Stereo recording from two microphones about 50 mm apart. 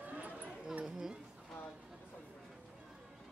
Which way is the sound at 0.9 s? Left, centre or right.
Centre.